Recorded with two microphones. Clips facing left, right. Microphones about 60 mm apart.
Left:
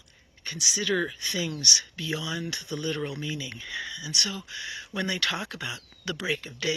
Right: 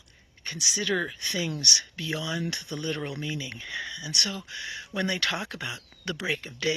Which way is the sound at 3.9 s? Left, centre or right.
Centre.